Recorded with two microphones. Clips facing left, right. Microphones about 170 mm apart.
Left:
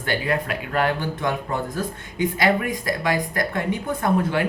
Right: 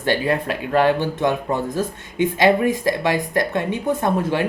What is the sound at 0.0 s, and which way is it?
Speech, 25° right (ahead or behind).